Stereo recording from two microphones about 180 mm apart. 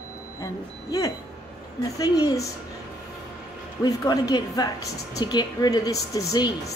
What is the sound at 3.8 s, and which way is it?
A woman's voice, 20° left (ahead or behind).